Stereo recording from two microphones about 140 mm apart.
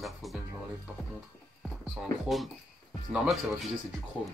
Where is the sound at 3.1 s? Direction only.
5° right (ahead or behind).